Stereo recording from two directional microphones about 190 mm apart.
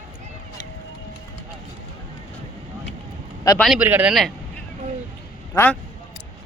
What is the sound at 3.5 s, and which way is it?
Speech, centre (ahead or behind).